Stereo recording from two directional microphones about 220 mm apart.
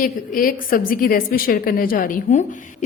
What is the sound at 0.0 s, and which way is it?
A woman's voice, 40° left (ahead or behind).